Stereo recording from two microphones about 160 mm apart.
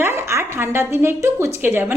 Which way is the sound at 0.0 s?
15° right (ahead or behind).